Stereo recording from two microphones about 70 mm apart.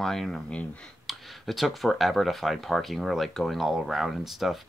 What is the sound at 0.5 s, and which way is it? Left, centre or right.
Speech, centre.